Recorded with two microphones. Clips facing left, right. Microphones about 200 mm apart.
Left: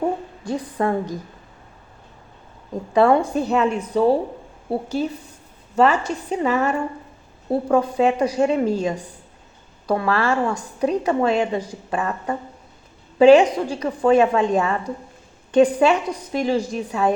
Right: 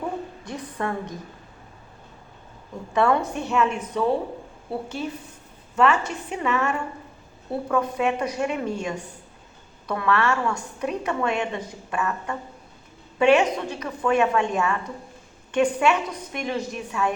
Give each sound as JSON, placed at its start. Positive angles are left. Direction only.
{"t": 0.0, "sound": "a sound", "side_deg": 30}
{"t": 2.9, "sound": "a woman's voice", "side_deg": 30}
{"t": 5.7, "sound": "a woman's voice", "side_deg": 35}